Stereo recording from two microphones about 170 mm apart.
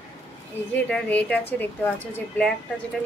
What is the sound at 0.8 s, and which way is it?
Speech, 5° left (ahead or behind).